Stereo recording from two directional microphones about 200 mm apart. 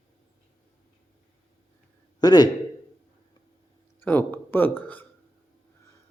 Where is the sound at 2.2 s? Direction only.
20° left (ahead or behind).